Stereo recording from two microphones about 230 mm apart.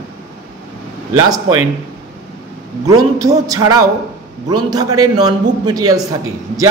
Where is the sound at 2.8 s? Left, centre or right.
Centre.